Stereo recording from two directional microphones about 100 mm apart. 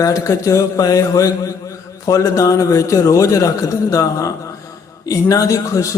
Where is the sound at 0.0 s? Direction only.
30° left (ahead or behind).